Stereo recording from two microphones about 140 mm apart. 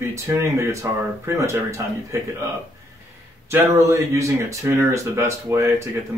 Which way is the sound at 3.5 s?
20° right (ahead or behind).